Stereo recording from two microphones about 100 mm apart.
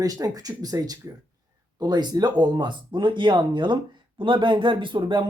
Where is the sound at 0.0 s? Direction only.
40° right (ahead or behind).